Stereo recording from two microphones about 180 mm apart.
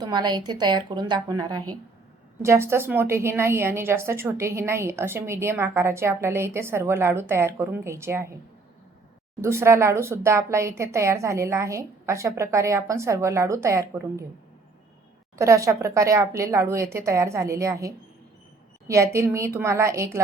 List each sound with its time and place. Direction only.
0.0 s a woman's voice: 25° right (ahead or behind)
9.4 s a woman's voice: 15° right (ahead or behind)
15.4 s a woman's voice: 15° right (ahead or behind)